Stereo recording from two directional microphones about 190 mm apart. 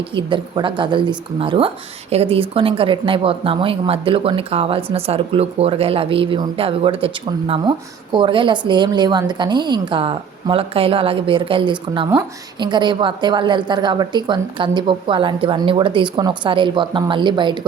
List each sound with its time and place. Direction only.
0.1 s speech: 25° right (ahead or behind)